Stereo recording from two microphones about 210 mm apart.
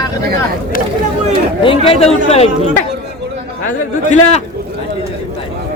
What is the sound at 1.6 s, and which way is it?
Speech, 25° left (ahead or behind).